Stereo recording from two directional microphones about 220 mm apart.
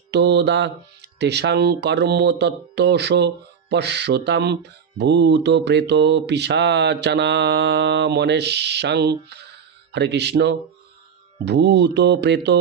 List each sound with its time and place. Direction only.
0.1 s speech: 50° right (ahead or behind)